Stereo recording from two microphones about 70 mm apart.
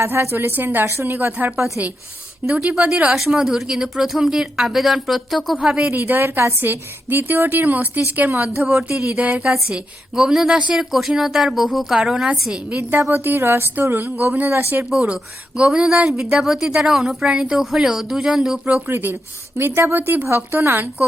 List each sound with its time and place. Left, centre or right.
0.0 s a woman's voice: right
2.7 s a woman's voice: centre
5.5 s speech: centre
5.9 s a woman's voice: right
8.8 s a woman's voice: centre
12.6 s a woman's voice: right
13.0 s a woman's voice: right
15.0 s speech: centre
18.9 s a woman's voice: right